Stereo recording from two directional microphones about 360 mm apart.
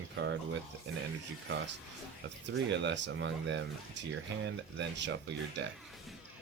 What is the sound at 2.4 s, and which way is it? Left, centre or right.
Speech, right.